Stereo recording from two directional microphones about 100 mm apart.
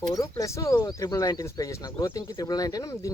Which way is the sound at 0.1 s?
35° left (ahead or behind).